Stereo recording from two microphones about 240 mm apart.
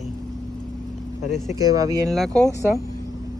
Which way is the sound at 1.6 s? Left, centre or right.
Centre.